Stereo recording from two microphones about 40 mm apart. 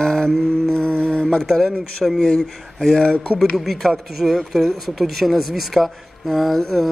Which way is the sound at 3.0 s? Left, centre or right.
Centre.